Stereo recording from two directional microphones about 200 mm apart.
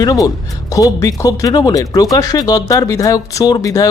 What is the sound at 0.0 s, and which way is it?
Speech, 20° left (ahead or behind).